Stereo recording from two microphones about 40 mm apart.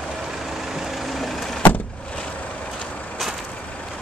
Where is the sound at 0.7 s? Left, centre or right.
Centre.